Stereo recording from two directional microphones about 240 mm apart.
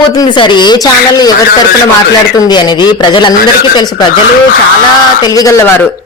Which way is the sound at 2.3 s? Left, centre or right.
Centre.